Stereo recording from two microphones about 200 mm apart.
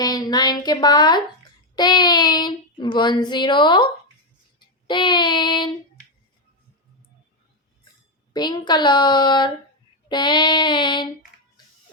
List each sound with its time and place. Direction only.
0.0 s speech: 20° left (ahead or behind)
1.7 s child singing: 20° left (ahead or behind)
8.3 s child singing: 20° left (ahead or behind)